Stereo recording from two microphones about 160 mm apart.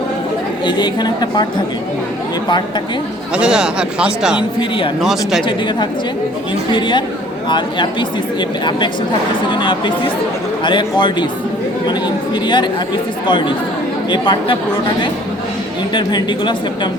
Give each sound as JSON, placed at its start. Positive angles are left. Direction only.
{"t": 0.6, "sound": "speech", "side_deg": 25}
{"t": 3.3, "sound": "speech", "side_deg": -5}
{"t": 5.5, "sound": "speech", "side_deg": 30}
{"t": 16.0, "sound": "speech", "side_deg": 30}